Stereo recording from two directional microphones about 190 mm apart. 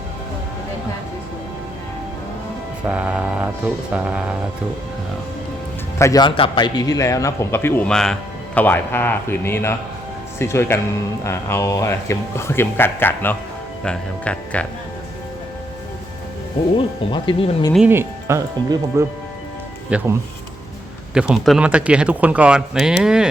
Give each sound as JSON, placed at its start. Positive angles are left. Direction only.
{"t": 2.8, "sound": "speech", "side_deg": -5}
{"t": 6.0, "sound": "a man's voice", "side_deg": 20}
{"t": 16.7, "sound": "speech", "side_deg": 25}
{"t": 17.7, "sound": "speech", "side_deg": -10}
{"t": 21.1, "sound": "speech", "side_deg": -5}